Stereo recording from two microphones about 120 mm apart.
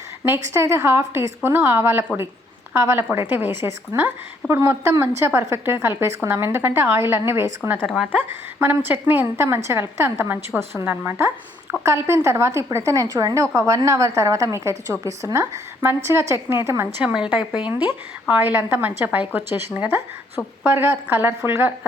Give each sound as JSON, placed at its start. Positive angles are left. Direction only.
{"t": 0.3, "sound": "a woman's voice", "side_deg": -25}
{"t": 7.8, "sound": "speech", "side_deg": 0}
{"t": 8.5, "sound": "a woman's voice", "side_deg": -20}
{"t": 17.0, "sound": "a woman's voice", "side_deg": -10}
{"t": 18.3, "sound": "a woman's voice", "side_deg": -15}